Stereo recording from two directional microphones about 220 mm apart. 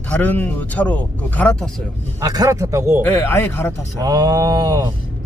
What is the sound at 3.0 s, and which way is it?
Speech, 10° left (ahead or behind).